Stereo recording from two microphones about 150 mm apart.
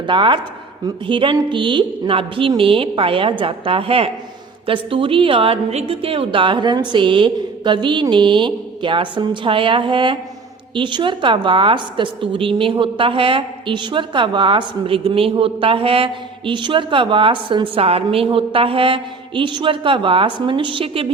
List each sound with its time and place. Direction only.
0.0 s a woman's voice: 35° right (ahead or behind)